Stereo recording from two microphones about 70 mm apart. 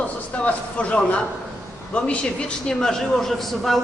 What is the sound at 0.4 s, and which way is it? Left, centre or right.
Speech, centre.